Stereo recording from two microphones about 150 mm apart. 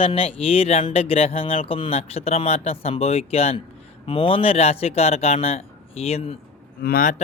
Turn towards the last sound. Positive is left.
turn(degrees=70)  # may be behind; listen again after turning